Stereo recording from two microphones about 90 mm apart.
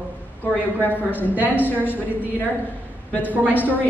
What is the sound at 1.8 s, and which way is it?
Speech, 20° left (ahead or behind).